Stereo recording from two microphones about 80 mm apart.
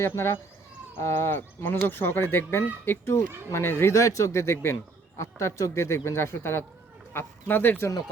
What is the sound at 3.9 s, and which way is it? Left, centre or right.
Speech, left.